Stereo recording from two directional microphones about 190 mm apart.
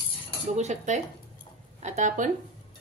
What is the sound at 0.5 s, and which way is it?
Speech, 40° right (ahead or behind).